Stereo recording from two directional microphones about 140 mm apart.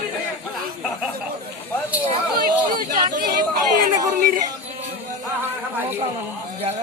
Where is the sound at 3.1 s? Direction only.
85° right.